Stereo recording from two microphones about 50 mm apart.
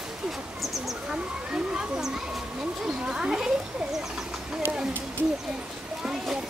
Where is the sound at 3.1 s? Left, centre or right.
Centre.